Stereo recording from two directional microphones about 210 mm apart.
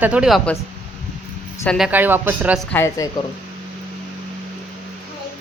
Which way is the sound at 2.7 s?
10° left (ahead or behind).